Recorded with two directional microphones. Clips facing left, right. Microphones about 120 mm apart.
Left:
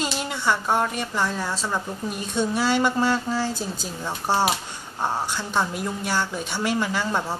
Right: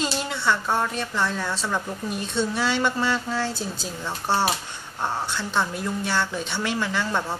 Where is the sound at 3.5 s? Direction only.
45° left (ahead or behind).